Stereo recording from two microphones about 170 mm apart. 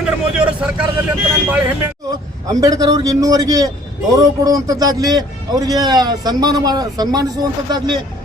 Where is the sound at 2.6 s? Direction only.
20° right (ahead or behind).